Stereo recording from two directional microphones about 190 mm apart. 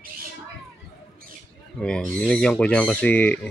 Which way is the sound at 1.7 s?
5° left (ahead or behind).